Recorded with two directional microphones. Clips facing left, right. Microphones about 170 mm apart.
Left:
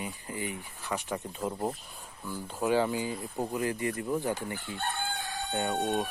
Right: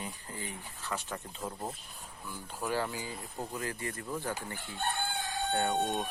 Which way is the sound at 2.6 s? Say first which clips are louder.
Left 7 dB; 15° left (ahead or behind).